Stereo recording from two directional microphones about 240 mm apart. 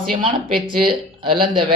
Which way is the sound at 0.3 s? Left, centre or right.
Right.